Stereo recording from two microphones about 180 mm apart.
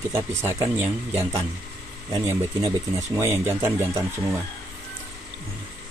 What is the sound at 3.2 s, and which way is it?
Speech, 15° right (ahead or behind).